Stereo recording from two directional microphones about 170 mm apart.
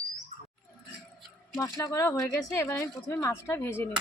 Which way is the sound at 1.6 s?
20° left (ahead or behind).